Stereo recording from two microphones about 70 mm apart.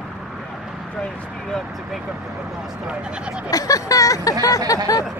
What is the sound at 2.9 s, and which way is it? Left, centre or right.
Speech, centre.